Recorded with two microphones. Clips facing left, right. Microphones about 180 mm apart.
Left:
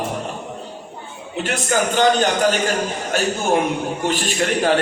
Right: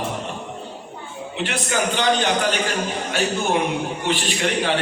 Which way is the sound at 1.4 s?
45° left (ahead or behind).